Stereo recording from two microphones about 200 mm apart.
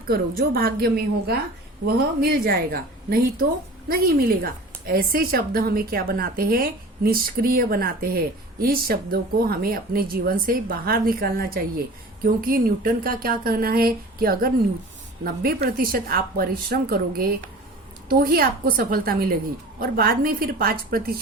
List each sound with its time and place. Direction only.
0.1 s a woman's voice: 50° right (ahead or behind)